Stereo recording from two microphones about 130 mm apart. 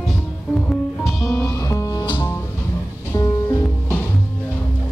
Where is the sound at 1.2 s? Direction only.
20° left (ahead or behind).